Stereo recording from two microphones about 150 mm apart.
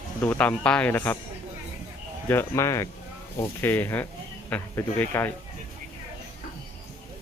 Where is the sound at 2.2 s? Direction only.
15° left (ahead or behind).